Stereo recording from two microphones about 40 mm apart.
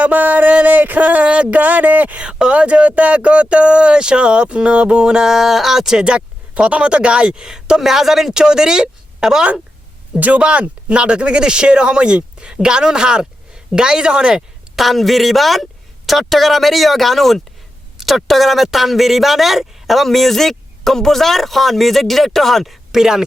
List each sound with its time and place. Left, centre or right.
0.0 s a sound: right
1.5 s a sound: right
2.1 s speech: right
6.1 s a woman's voice: right; by 8.3 s centre
8.3 s speech: centre
10.2 s a sound: right
10.4 s a woman's voice: right
14.8 s speech: centre
22.9 s speech: centre